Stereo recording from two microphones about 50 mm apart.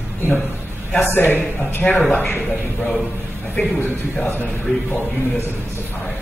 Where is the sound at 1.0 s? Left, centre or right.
Left.